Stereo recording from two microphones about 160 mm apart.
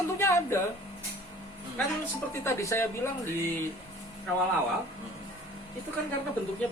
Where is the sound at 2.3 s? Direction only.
15° left (ahead or behind).